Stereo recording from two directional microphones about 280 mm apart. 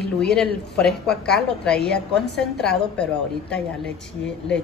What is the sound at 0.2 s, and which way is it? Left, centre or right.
A woman's voice, centre.